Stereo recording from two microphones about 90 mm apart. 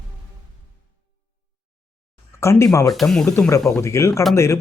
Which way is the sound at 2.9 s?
5° left (ahead or behind).